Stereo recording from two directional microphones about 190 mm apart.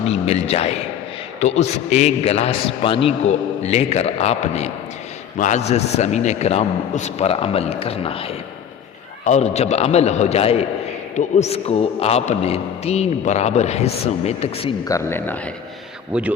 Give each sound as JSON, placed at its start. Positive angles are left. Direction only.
{"t": 0.0, "sound": "a man's voice", "side_deg": 35}
{"t": 14.8, "sound": "speech", "side_deg": 15}
{"t": 16.1, "sound": "speech", "side_deg": -5}